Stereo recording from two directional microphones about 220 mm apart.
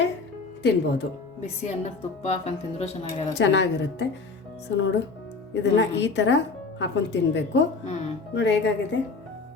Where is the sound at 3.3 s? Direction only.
55° left (ahead or behind).